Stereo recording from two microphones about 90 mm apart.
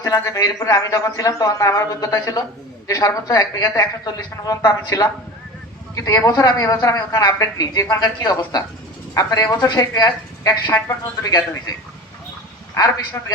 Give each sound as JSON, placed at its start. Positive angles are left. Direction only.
{"t": 0.0, "sound": "a man's voice", "side_deg": 40}
{"t": 12.7, "sound": "a man's voice", "side_deg": 40}